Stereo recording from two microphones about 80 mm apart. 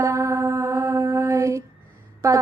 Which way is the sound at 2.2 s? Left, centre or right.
Right.